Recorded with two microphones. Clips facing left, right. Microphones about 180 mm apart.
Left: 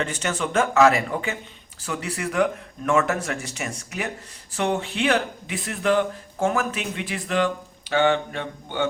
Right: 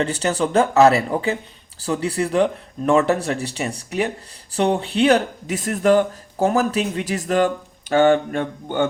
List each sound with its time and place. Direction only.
0.0 s speech: 35° right (ahead or behind)